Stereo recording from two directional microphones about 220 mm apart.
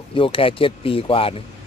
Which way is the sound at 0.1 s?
25° left (ahead or behind).